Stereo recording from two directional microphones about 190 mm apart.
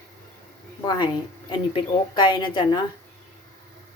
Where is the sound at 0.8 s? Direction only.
20° left (ahead or behind).